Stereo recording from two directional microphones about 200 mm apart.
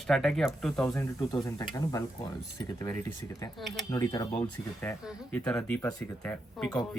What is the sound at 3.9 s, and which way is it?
Speech, 20° left (ahead or behind).